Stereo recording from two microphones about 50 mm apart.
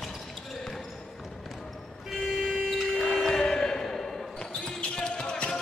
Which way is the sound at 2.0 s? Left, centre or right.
Centre.